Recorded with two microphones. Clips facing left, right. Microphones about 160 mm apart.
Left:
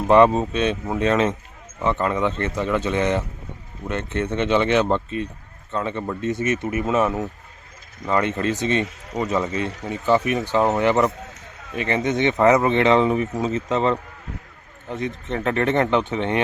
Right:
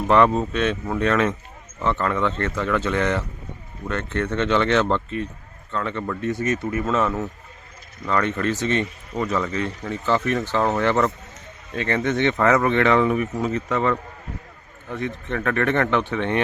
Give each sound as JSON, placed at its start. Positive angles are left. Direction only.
{"t": 0.1, "sound": "speech", "side_deg": 15}